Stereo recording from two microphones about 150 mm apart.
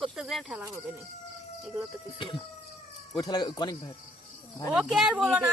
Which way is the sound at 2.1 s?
35° left (ahead or behind).